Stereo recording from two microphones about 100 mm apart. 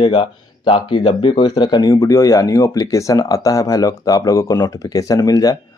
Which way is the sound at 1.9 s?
35° left (ahead or behind).